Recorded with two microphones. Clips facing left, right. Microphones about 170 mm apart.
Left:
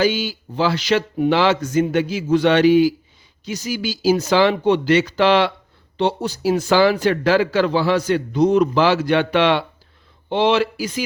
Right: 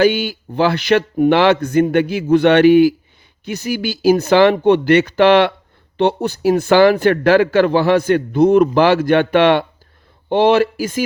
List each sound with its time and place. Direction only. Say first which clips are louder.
0.0 s speech: right 5 dB; 60° right (ahead or behind)